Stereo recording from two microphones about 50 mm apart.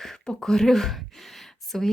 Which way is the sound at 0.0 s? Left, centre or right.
Centre.